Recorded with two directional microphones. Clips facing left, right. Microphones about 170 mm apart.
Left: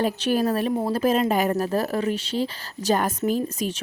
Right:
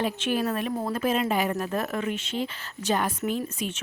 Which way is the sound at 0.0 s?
40° left (ahead or behind).